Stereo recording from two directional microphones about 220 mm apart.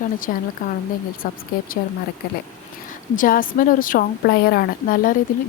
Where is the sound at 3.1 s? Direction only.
40° left (ahead or behind).